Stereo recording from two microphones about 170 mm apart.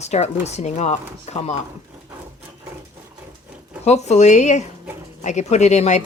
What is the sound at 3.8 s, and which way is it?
Speech, 40° left (ahead or behind).